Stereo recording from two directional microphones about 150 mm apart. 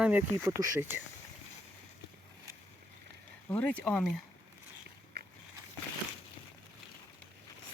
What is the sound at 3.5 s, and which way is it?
Speech, 10° left (ahead or behind).